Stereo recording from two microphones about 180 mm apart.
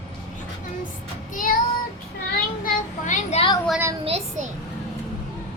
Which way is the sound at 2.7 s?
45° left (ahead or behind).